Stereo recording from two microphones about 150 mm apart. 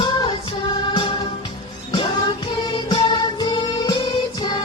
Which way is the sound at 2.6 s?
30° left (ahead or behind).